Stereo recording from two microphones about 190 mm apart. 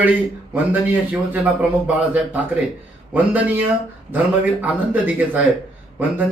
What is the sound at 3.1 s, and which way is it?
Speech, 10° right (ahead or behind).